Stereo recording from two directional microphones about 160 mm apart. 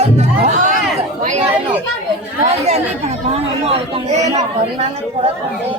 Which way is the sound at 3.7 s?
40° right (ahead or behind).